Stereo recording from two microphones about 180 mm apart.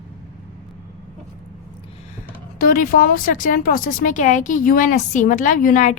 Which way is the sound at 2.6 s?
50° left (ahead or behind).